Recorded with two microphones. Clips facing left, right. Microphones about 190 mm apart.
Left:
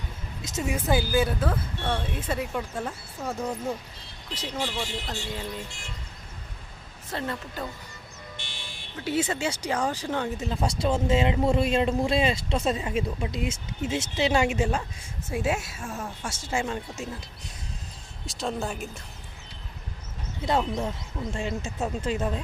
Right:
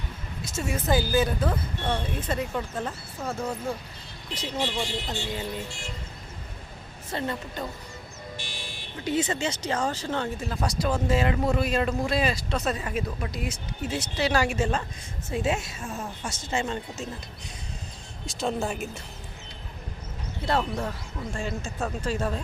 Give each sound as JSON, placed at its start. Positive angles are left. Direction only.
{"t": 0.4, "sound": "speech", "side_deg": 20}
{"t": 4.4, "sound": "speech", "side_deg": 0}
{"t": 7.1, "sound": "speech", "side_deg": 0}
{"t": 8.4, "sound": "buzzer", "side_deg": 25}
{"t": 9.0, "sound": "speech", "side_deg": 5}
{"t": 18.3, "sound": "speech", "side_deg": 0}
{"t": 20.4, "sound": "speech", "side_deg": 15}